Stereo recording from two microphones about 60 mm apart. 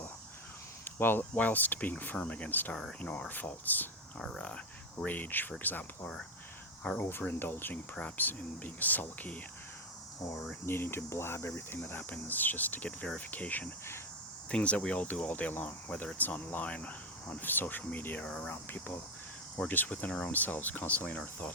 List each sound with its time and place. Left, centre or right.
0.9 s speech: left
4.2 s speech: centre
5.0 s speech: left
10.5 s cricket: left
11.7 s speech: left